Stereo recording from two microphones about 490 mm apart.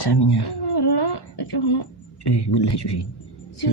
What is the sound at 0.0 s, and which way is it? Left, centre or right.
Speech, left.